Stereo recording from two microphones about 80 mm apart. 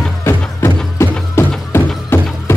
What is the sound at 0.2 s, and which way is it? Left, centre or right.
Music, left.